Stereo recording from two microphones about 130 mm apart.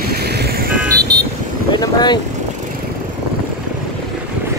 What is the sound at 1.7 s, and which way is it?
Speech, 35° left (ahead or behind).